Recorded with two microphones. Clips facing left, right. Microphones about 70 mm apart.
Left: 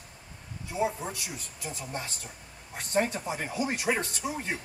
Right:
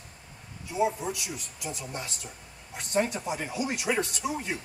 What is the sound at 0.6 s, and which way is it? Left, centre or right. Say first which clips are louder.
A man's voice: right 3 dB; left.